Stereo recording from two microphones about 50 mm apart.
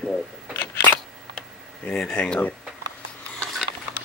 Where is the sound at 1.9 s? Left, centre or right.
Centre.